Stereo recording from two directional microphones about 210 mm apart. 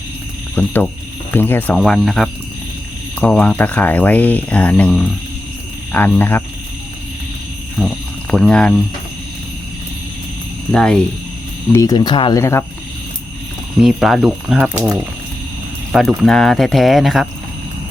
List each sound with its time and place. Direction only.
0.5 s speech: 10° left (ahead or behind)
7.8 s speech: centre (ahead or behind)
10.7 s speech: 5° left (ahead or behind)
11.7 s speech: 15° left (ahead or behind)
13.8 s speech: centre (ahead or behind)